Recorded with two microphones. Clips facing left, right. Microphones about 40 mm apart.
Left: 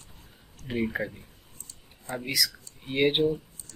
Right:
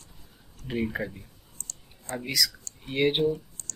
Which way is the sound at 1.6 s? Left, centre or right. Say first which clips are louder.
Right 8 dB; right.